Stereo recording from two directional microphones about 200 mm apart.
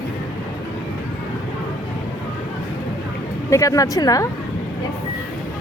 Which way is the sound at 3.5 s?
15° left (ahead or behind).